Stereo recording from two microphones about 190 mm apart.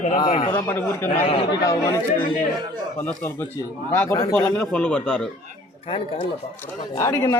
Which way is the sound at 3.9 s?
15° left (ahead or behind).